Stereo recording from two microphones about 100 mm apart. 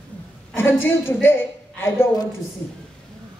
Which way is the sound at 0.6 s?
20° left (ahead or behind).